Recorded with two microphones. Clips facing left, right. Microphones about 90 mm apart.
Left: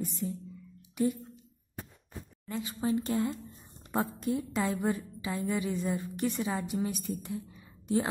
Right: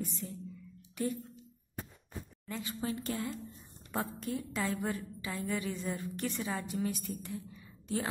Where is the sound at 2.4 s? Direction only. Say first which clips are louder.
Left 5 dB; 20° left (ahead or behind).